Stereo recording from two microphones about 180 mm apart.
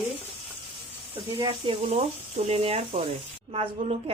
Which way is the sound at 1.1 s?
30° right (ahead or behind).